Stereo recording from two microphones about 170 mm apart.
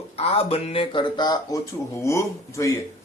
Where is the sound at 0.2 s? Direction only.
35° left (ahead or behind).